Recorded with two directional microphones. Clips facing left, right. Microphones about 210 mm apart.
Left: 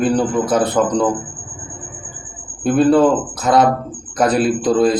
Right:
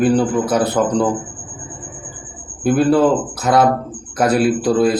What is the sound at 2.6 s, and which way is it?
A man's voice, 5° right (ahead or behind).